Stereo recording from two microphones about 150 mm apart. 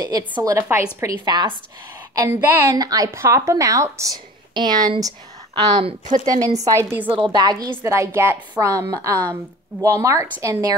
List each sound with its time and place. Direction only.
0.3 s a woman's voice: 25° right (ahead or behind)
1.2 s a woman's voice: 30° right (ahead or behind)
2.1 s a woman's voice: 15° right (ahead or behind)
7.1 s a woman's voice: 35° right (ahead or behind)